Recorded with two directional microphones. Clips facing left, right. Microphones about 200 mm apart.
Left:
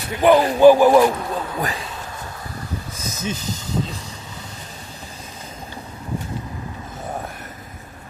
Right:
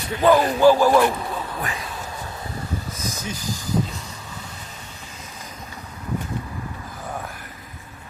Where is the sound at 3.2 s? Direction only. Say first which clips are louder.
Left 3 dB; 25° left (ahead or behind).